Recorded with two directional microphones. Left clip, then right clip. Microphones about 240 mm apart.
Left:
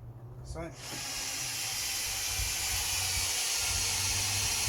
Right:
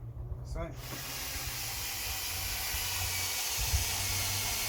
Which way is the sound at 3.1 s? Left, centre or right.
Centre.